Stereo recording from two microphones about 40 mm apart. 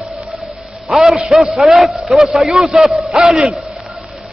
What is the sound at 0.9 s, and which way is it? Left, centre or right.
A man's voice, centre.